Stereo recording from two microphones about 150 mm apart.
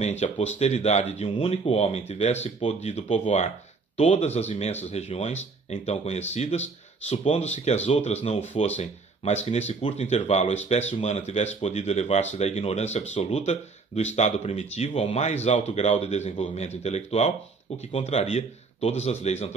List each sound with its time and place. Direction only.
0.2 s speech: 45° left (ahead or behind)